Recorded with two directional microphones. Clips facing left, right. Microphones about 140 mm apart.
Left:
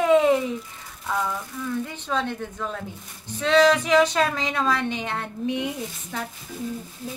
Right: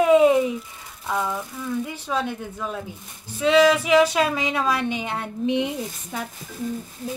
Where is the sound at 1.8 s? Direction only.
10° right (ahead or behind).